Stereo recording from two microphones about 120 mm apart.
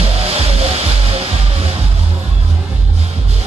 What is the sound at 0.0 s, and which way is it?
Music, 55° right (ahead or behind).